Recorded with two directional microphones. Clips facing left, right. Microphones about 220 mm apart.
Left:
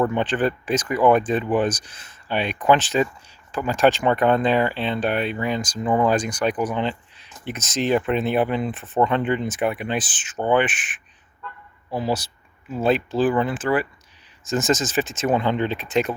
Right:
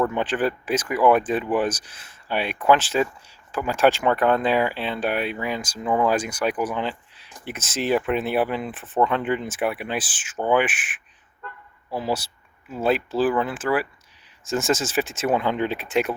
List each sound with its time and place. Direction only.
0.1 s speech: 5° right (ahead or behind)